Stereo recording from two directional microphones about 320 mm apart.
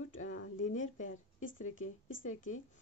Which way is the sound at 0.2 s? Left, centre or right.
Left.